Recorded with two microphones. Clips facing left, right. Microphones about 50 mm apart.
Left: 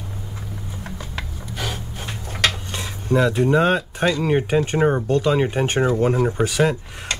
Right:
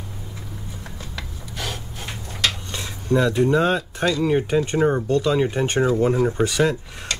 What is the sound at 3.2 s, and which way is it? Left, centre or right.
Speech, centre.